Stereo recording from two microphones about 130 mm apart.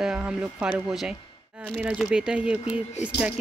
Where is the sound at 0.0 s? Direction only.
10° right (ahead or behind).